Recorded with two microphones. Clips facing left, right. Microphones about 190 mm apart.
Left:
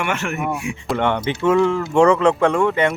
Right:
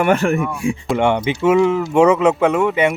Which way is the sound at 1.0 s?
10° right (ahead or behind).